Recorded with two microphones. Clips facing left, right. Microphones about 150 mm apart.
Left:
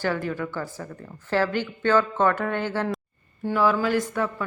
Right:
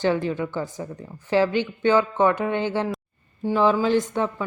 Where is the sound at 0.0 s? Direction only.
20° right (ahead or behind).